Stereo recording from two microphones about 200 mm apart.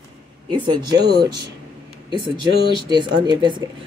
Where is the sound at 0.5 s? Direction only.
20° right (ahead or behind).